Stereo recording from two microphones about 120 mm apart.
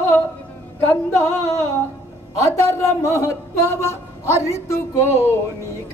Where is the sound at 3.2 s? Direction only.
25° left (ahead or behind).